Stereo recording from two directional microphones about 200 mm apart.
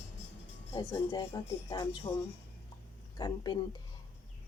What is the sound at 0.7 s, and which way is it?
Speech, 20° left (ahead or behind).